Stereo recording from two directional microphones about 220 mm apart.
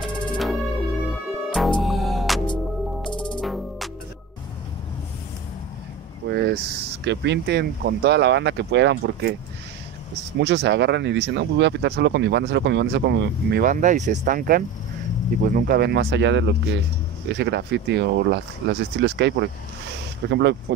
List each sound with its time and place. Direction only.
0.0 s music: centre (ahead or behind)
2.4 s music: 20° left (ahead or behind)
3.3 s music: centre (ahead or behind)
6.2 s vehicle: 50° right (ahead or behind)
7.1 s speech: 50° right (ahead or behind)
10.4 s speech: 50° right (ahead or behind)